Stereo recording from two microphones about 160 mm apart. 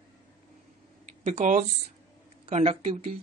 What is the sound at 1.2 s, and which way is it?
Speech, 45° right (ahead or behind).